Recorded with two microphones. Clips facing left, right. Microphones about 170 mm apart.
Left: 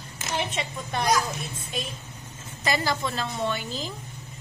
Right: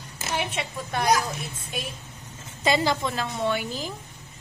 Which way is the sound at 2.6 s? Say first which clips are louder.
Right 3 dB; 25° right (ahead or behind).